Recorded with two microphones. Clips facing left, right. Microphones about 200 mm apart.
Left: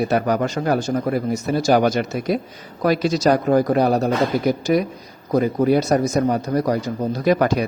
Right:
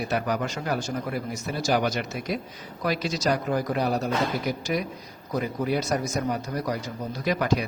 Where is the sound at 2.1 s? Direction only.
40° left (ahead or behind).